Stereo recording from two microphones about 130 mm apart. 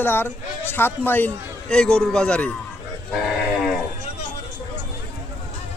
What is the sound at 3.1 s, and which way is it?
Livestock, 5° right (ahead or behind).